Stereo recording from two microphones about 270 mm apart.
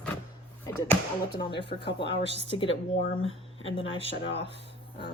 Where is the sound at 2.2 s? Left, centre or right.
Left.